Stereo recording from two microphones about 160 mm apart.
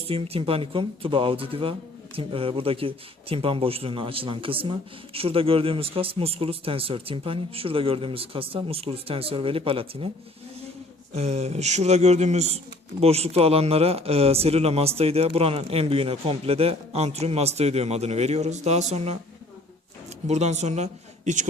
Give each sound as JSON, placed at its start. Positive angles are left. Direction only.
{"t": 0.1, "sound": "speech", "side_deg": -35}
{"t": 11.1, "sound": "speech", "side_deg": -40}
{"t": 20.2, "sound": "speech", "side_deg": -45}